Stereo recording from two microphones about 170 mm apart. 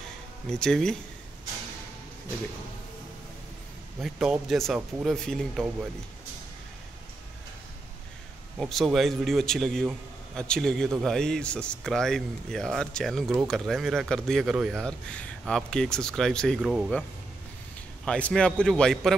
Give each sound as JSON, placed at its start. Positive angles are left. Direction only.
{"t": 0.5, "sound": "speech", "side_deg": 5}
{"t": 4.0, "sound": "speech", "side_deg": -5}
{"t": 8.5, "sound": "speech", "side_deg": 0}
{"t": 18.0, "sound": "speech", "side_deg": 5}